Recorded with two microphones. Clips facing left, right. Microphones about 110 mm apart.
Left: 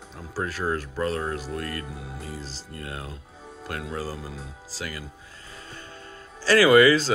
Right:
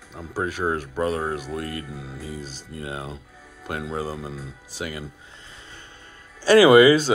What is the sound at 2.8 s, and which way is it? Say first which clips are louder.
Speech: right 5 dB; 20° right (ahead or behind).